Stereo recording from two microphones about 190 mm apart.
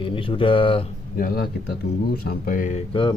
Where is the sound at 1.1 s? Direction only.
50° left (ahead or behind).